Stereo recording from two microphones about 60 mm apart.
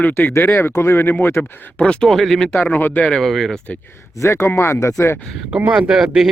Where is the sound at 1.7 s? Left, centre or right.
Centre.